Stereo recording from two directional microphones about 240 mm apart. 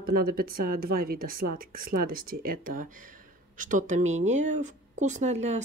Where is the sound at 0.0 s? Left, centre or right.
Right.